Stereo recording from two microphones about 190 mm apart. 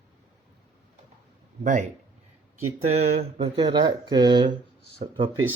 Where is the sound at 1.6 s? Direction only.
40° right (ahead or behind).